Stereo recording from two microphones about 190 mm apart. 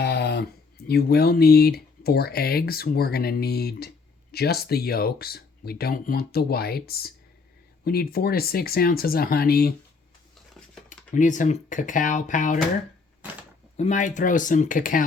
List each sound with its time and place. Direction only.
0.0 s a sound: 60° left (ahead or behind)
0.9 s speech: 55° left (ahead or behind)
10.8 s speech: 40° left (ahead or behind)
13.7 s speech: 40° left (ahead or behind)